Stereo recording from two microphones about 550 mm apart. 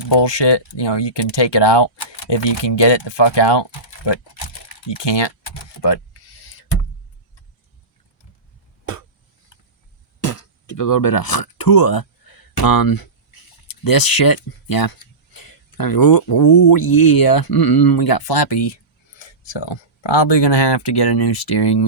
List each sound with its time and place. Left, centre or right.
0.0 s speech: left
10.2 s speech: left